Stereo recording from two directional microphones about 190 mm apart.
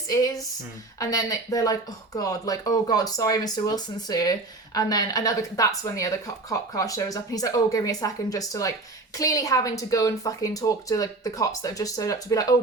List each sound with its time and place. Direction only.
0.1 s a woman's voice: 15° left (ahead or behind)